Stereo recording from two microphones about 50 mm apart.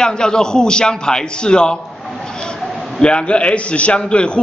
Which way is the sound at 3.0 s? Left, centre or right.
Centre.